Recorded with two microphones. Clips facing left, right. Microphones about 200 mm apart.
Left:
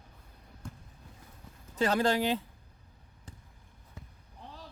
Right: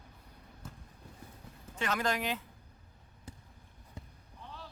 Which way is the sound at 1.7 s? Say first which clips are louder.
Left 6 dB; 35° left (ahead or behind).